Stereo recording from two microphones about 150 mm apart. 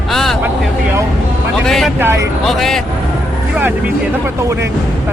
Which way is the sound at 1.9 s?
15° right (ahead or behind).